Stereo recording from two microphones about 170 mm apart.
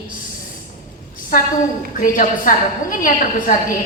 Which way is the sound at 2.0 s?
55° left (ahead or behind).